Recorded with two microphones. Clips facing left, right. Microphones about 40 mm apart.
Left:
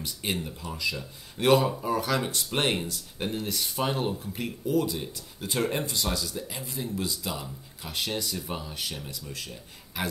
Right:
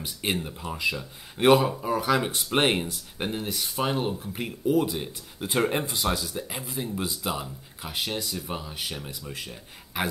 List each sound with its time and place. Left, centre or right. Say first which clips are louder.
0.0 s speech: right 2 dB; right
1.5 s speech: right 2 dB; centre